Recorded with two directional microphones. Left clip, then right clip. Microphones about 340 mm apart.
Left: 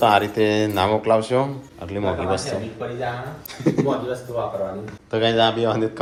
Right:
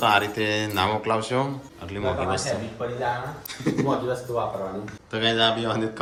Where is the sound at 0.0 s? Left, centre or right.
Centre.